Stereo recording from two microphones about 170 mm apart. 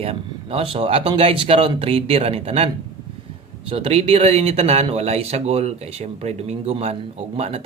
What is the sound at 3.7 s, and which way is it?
Speech, 35° right (ahead or behind).